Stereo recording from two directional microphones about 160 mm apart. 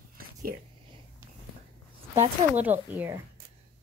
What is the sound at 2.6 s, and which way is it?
Speech, 10° right (ahead or behind).